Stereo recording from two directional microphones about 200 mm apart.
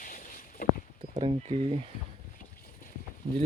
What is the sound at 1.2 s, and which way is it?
Speech, 30° right (ahead or behind).